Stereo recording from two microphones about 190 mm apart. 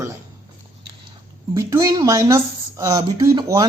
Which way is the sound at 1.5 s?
15° right (ahead or behind).